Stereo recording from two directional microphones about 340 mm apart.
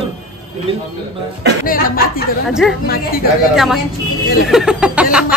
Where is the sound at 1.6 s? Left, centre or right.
Left.